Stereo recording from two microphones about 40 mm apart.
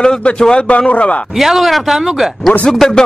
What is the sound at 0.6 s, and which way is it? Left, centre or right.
Speech, left.